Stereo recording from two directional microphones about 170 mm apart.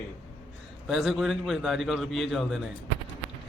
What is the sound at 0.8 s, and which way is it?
A man's voice, centre (ahead or behind).